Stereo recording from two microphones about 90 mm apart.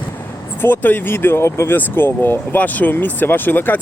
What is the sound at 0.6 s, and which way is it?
Speech, 25° left (ahead or behind).